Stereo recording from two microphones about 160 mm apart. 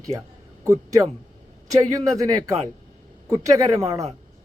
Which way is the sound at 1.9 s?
20° right (ahead or behind).